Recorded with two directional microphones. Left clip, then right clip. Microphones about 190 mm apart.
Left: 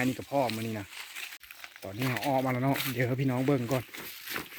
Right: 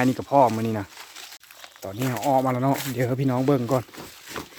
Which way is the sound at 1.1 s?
5° right (ahead or behind).